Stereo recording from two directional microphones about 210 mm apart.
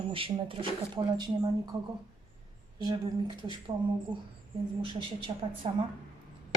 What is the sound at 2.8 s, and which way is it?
Speech, 20° right (ahead or behind).